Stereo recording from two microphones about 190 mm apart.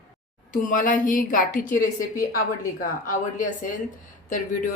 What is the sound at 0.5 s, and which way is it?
Speech, 45° left (ahead or behind).